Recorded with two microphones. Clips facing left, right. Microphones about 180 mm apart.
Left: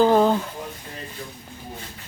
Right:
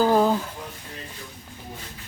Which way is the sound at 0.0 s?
5° right (ahead or behind).